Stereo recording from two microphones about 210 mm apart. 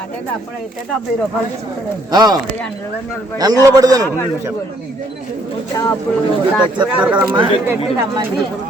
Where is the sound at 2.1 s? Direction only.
20° right (ahead or behind).